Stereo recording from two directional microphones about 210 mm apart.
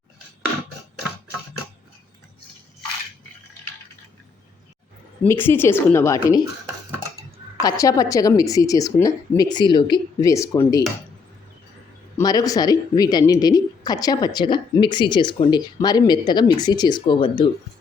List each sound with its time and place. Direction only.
5.2 s a woman's voice: 10° left (ahead or behind)
7.6 s a woman's voice: 15° left (ahead or behind)
12.1 s a woman's voice: 15° left (ahead or behind)